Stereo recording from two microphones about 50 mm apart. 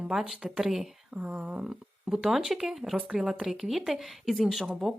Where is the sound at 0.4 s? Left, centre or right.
Centre.